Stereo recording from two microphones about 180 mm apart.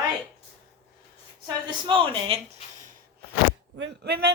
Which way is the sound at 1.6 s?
30° right (ahead or behind).